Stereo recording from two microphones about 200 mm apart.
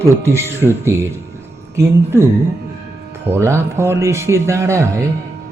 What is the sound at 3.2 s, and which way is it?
Speech, 10° right (ahead or behind).